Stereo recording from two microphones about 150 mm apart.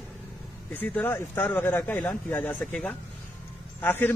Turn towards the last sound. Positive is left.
turn(degrees=15)  # may be behind; listen again after turning